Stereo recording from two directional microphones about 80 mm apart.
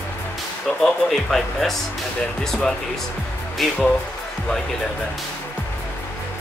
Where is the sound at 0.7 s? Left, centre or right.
Centre.